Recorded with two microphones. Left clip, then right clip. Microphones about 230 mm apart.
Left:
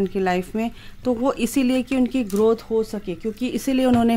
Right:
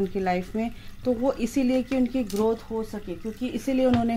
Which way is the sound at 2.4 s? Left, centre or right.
Left.